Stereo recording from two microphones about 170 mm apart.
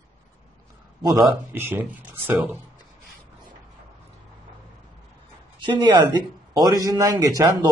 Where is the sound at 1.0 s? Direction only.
20° right (ahead or behind).